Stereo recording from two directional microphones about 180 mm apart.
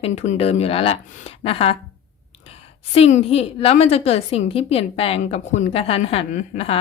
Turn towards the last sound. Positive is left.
turn(degrees=35)  # may be behind; listen again after turning